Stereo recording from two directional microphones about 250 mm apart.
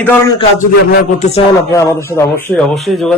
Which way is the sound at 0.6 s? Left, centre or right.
Left.